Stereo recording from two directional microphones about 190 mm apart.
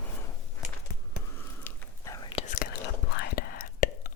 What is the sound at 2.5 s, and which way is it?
Whispering, 50° left (ahead or behind).